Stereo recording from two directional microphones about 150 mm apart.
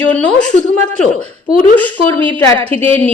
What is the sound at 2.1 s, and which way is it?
A woman's voice, 10° left (ahead or behind).